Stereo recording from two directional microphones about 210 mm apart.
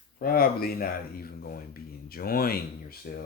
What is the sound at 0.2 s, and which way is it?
Speech, 45° left (ahead or behind).